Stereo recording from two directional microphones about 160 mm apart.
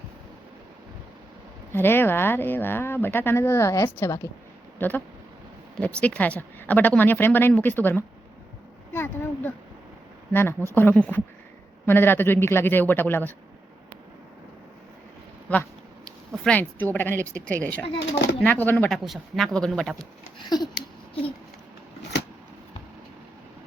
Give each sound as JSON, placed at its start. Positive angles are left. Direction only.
{"t": 1.7, "sound": "speech", "side_deg": 15}
{"t": 8.9, "sound": "a sound", "side_deg": 15}
{"t": 10.8, "sound": "speech", "side_deg": 10}
{"t": 16.0, "sound": "speech", "side_deg": 5}
{"t": 17.8, "sound": "speech", "side_deg": 35}
{"t": 18.3, "sound": "speech", "side_deg": 10}
{"t": 18.9, "sound": "speech", "side_deg": 0}
{"t": 20.4, "sound": "a sound", "side_deg": 25}